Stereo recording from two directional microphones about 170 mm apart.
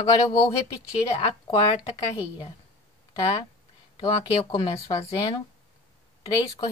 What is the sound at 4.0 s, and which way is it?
Speech, 20° left (ahead or behind).